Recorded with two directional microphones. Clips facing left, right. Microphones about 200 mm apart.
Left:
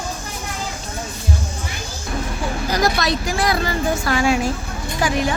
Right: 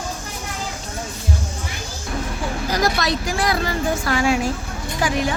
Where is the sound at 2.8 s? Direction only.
25° left (ahead or behind).